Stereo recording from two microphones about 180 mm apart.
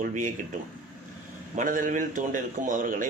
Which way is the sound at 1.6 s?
45° right (ahead or behind).